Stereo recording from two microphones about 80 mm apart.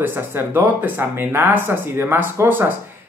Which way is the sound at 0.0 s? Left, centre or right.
Right.